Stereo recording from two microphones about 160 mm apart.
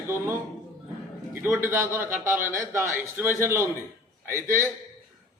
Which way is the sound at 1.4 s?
15° right (ahead or behind).